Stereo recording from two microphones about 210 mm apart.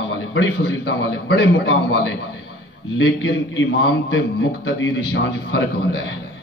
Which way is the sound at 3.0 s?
65° left (ahead or behind).